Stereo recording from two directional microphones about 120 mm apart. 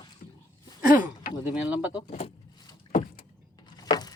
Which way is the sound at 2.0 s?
55° left (ahead or behind).